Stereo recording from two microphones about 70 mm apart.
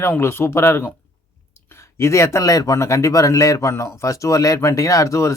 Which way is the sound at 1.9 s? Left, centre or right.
Left.